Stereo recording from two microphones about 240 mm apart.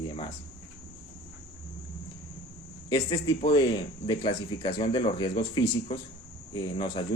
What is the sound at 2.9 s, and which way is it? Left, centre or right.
Speech, centre.